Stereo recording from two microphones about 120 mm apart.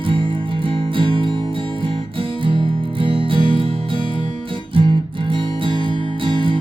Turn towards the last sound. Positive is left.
turn(degrees=-45)  # may be behind; listen again after turning